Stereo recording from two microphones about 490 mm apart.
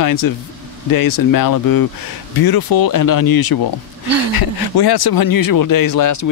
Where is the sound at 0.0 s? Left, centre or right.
Left.